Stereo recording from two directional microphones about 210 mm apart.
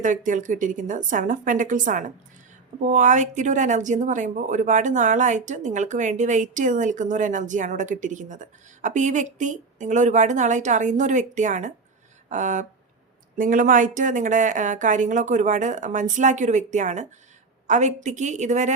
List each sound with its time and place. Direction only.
0.0 s speech: 35° right (ahead or behind)